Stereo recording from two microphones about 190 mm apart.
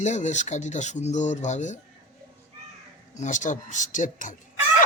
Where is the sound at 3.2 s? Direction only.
40° left (ahead or behind).